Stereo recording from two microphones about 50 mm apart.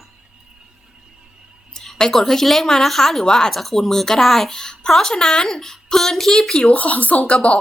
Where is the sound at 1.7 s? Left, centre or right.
Centre.